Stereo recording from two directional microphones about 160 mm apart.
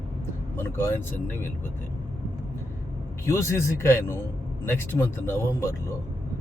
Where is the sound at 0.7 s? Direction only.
15° left (ahead or behind).